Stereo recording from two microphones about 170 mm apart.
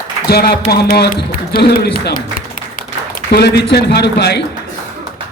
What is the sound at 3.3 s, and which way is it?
A man's voice, 75° left (ahead or behind).